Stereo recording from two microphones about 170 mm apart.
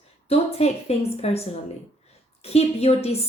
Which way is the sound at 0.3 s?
35° left (ahead or behind).